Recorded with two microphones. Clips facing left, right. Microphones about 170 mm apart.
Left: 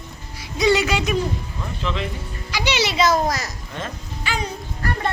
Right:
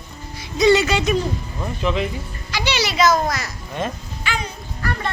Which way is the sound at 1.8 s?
15° right (ahead or behind).